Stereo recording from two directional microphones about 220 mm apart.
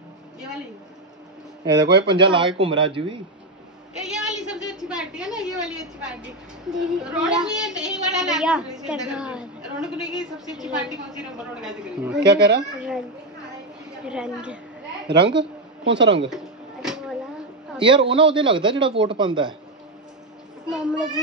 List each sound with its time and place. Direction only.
1.8 s a man's voice: 20° right (ahead or behind)
4.5 s a sound: 5° right (ahead or behind)
6.7 s a woman's voice: 5° right (ahead or behind)
12.2 s speech: 50° right (ahead or behind)
14.0 s a woman's voice: 5° right (ahead or behind)
15.0 s speech: 50° right (ahead or behind)
17.7 s a man's voice: 20° right (ahead or behind)
20.7 s a woman's voice: 5° right (ahead or behind)